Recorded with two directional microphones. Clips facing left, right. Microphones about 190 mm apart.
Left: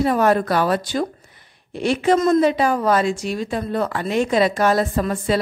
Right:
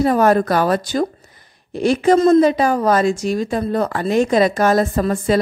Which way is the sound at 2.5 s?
40° right (ahead or behind).